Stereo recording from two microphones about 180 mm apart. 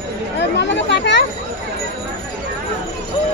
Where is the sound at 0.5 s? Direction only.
70° left (ahead or behind).